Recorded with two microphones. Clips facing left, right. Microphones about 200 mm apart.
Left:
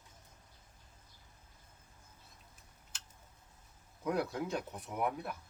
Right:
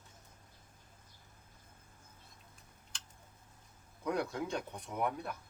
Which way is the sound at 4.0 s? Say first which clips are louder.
Left 1 dB; 5° left (ahead or behind).